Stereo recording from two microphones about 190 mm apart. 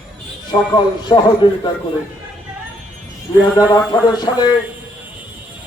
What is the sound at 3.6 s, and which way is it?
Speech, 20° left (ahead or behind).